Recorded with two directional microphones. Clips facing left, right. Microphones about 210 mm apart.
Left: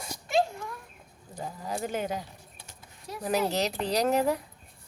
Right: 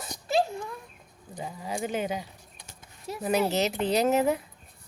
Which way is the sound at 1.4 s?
Centre (ahead or behind).